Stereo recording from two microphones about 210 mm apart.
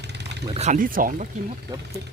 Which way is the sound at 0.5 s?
35° right (ahead or behind).